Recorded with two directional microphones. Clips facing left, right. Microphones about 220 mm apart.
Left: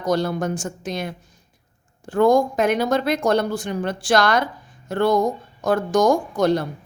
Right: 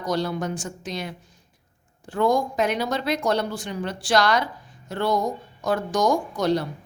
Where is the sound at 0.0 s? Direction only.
50° left (ahead or behind).